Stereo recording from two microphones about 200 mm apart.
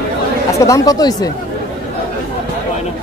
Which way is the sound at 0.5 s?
15° left (ahead or behind).